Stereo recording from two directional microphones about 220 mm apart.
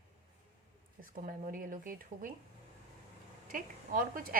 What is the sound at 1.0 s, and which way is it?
A woman's voice, 40° right (ahead or behind).